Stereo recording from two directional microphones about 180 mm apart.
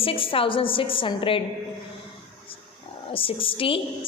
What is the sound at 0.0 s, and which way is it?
A woman's voice, 30° left (ahead or behind).